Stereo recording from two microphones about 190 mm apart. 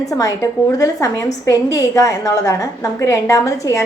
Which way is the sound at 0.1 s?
15° left (ahead or behind).